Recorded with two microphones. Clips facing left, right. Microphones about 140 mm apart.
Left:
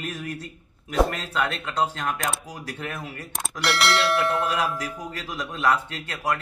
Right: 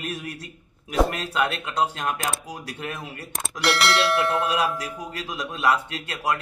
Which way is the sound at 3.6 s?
Centre (ahead or behind).